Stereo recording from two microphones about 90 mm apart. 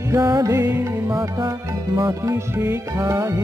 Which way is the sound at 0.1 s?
40° right (ahead or behind).